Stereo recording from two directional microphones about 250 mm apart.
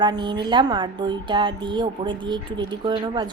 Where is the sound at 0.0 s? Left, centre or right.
Centre.